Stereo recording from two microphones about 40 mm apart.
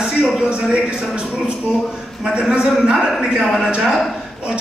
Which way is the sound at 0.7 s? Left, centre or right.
Right.